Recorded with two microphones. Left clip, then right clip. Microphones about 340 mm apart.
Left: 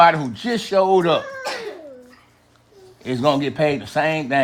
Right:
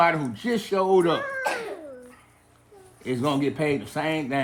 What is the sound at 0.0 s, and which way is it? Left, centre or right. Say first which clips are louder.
A man's voice: left 8 dB; left.